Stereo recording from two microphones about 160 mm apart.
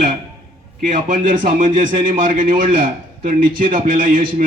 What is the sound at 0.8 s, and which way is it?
A man's voice, 55° right (ahead or behind).